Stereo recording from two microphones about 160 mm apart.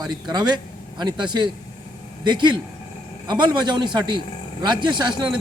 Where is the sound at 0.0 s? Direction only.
25° right (ahead or behind).